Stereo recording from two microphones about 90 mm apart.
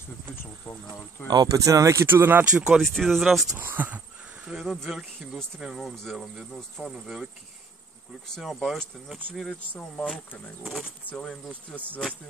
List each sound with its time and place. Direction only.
1.2 s speech: 50° right (ahead or behind); by 2.4 s 25° right (ahead or behind)
2.5 s speech: 10° right (ahead or behind)
2.8 s speech: 5° left (ahead or behind)
3.5 s speech: 20° right (ahead or behind)
4.5 s speech: 5° right (ahead or behind)
8.4 s speech: centre (ahead or behind)
9.8 s speech: 15° left (ahead or behind)
10.6 s speech: centre (ahead or behind)
11.1 s speech: 20° left (ahead or behind)